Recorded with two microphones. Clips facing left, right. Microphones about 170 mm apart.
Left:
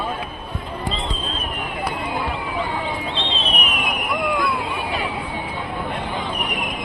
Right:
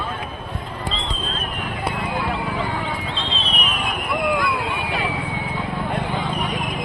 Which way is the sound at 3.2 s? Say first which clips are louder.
Left 2 dB; 30° right (ahead or behind).